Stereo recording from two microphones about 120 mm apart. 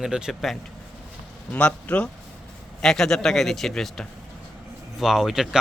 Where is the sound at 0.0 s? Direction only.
5° right (ahead or behind).